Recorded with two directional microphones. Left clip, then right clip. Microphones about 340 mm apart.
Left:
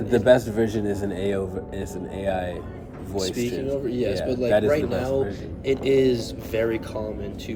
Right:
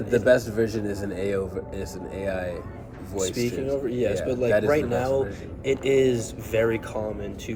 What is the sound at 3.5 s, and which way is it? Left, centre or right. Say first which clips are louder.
Speech: even; centre.